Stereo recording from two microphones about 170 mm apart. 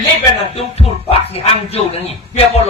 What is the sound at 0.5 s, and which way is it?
A man's voice, 35° left (ahead or behind).